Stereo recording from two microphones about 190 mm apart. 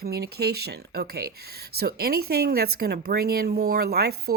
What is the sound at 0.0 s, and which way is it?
A woman's voice, 55° right (ahead or behind).